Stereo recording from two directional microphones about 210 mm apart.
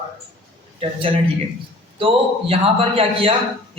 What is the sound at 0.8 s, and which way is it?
A man's voice, 25° right (ahead or behind).